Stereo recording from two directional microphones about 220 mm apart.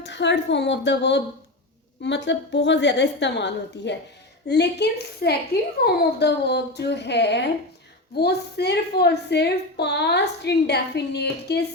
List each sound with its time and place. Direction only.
0.0 s a woman's voice: 55° left (ahead or behind)